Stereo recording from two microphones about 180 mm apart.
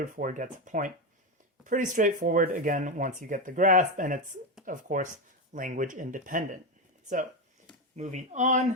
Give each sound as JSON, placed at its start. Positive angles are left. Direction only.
{"t": 0.0, "sound": "speech", "side_deg": -50}
{"t": 7.9, "sound": "speech", "side_deg": -40}